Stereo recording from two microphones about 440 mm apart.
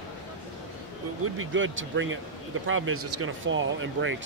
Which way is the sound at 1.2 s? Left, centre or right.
Right.